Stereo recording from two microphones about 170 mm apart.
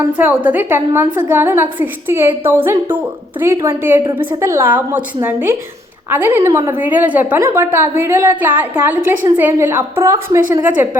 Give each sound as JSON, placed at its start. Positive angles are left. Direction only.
{"t": 0.0, "sound": "a woman's voice", "side_deg": -10}